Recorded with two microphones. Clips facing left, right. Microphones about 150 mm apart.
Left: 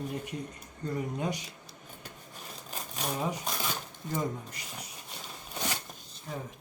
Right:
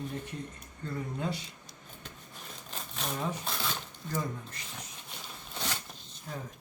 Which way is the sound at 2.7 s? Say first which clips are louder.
Left 2 dB; 15° left (ahead or behind).